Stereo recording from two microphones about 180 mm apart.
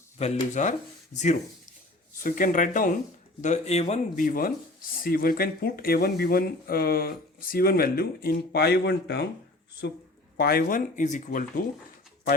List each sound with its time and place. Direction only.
0.2 s speech: 40° left (ahead or behind); by 9.2 s 65° left (ahead or behind)
10.3 s speech: 60° left (ahead or behind)